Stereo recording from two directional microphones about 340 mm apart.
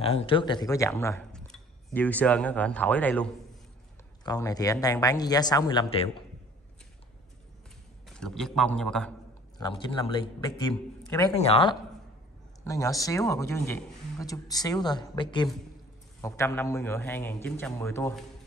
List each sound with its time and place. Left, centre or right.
0.0 s speech: centre
8.2 s speech: centre
9.6 s speech: centre